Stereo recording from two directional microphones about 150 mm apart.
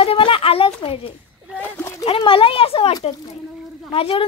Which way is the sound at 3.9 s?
40° left (ahead or behind).